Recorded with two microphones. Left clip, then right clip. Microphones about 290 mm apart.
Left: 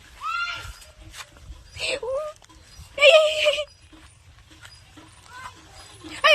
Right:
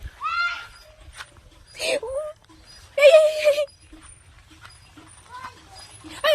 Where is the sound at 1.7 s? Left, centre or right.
Right.